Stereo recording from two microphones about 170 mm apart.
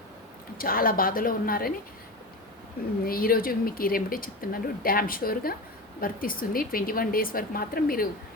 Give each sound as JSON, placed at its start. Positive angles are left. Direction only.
{"t": 0.5, "sound": "speech", "side_deg": 60}
{"t": 3.1, "sound": "speech", "side_deg": 60}